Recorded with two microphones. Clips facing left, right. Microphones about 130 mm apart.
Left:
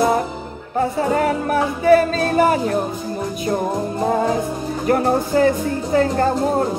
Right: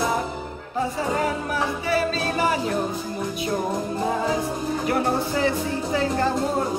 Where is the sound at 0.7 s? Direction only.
55° left (ahead or behind).